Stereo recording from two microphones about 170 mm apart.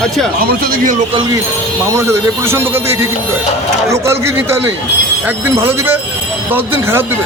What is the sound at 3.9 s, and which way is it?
A man's voice, 15° right (ahead or behind).